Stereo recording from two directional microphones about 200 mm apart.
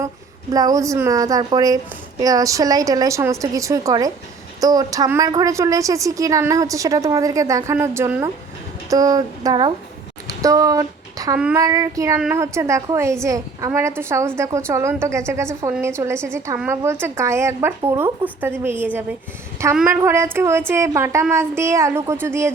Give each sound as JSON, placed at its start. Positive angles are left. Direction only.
{"t": 0.5, "sound": "a woman's voice", "side_deg": -20}